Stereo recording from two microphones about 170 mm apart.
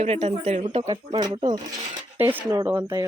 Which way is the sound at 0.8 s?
25° right (ahead or behind).